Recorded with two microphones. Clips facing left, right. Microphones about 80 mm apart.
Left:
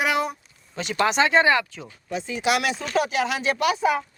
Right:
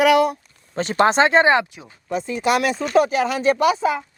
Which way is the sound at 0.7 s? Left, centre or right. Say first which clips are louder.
Right 5 dB; right.